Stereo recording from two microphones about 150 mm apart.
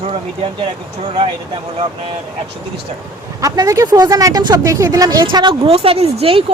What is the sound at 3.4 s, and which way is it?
A woman's voice, 25° right (ahead or behind).